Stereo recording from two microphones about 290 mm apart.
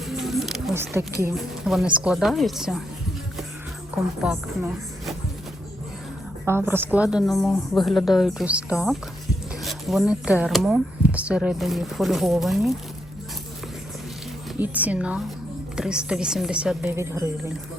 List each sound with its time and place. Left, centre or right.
0.1 s a sound: centre
1.2 s speech: centre
3.9 s speech: centre
6.4 s speech: centre
14.6 s speech: centre